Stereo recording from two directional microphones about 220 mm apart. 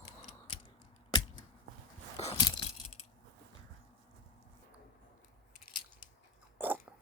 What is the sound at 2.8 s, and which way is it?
Coin, 30° left (ahead or behind).